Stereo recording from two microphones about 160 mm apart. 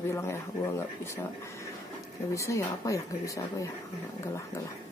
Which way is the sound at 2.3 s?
20° left (ahead or behind).